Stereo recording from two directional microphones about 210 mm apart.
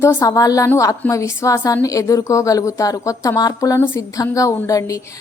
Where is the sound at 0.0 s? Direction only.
10° left (ahead or behind).